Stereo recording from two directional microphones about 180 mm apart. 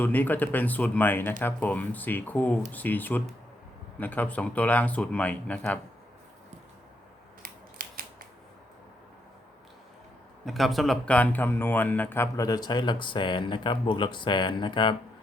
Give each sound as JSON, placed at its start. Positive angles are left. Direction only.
{"t": 0.0, "sound": "speech", "side_deg": 10}
{"t": 7.4, "sound": "scissors", "side_deg": -50}
{"t": 10.4, "sound": "speech", "side_deg": 0}